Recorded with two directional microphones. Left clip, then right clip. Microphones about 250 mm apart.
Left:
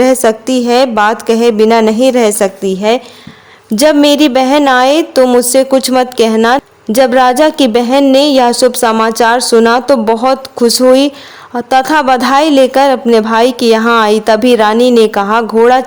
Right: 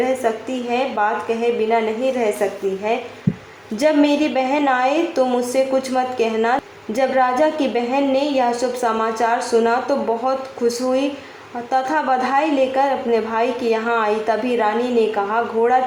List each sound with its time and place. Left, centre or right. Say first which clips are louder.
0.4 s a woman's voice: left 12 dB; left